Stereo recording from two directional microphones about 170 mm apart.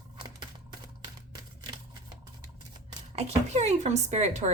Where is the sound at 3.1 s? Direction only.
40° right (ahead or behind).